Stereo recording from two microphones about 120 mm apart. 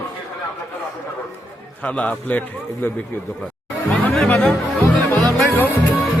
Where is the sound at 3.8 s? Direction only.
5° left (ahead or behind).